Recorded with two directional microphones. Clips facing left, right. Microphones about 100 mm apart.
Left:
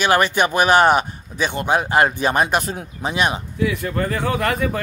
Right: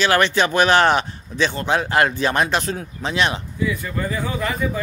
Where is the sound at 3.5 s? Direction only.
65° left (ahead or behind).